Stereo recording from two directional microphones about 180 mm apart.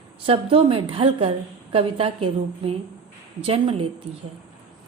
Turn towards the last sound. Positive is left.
turn(degrees=-30)  # may be behind; listen again after turning